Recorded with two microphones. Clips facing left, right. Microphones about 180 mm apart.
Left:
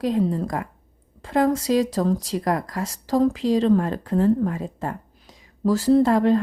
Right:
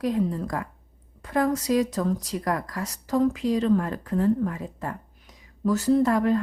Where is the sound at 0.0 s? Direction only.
30° left (ahead or behind).